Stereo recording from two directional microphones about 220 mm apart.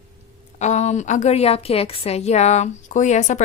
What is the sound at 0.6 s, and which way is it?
A woman's voice, 30° left (ahead or behind).